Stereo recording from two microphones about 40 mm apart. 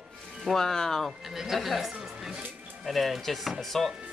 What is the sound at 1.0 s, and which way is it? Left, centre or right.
Speech, centre.